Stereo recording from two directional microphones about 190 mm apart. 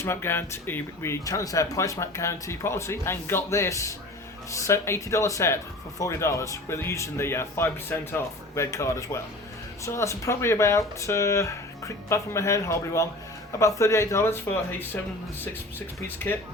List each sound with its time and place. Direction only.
0.0 s speech: 15° left (ahead or behind)
16.0 s speech: 10° left (ahead or behind)